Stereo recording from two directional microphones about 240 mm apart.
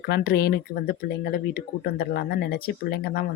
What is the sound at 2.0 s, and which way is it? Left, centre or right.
Speech, left.